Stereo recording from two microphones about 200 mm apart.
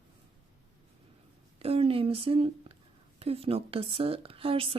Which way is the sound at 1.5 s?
30° right (ahead or behind).